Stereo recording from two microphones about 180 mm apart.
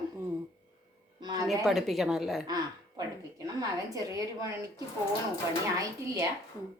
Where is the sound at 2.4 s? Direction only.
20° right (ahead or behind).